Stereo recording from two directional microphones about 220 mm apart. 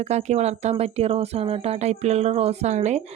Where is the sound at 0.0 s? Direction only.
30° right (ahead or behind).